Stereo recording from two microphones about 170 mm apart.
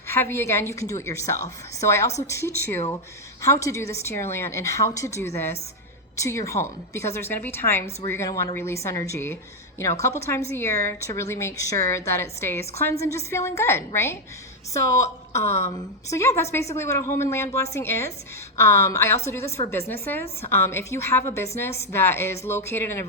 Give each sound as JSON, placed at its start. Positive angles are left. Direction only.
{"t": 0.1, "sound": "a woman's voice", "side_deg": 15}